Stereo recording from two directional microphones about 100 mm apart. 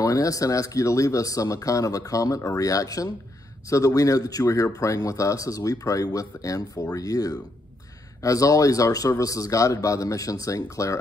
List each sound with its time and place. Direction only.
0.0 s speech: 35° left (ahead or behind)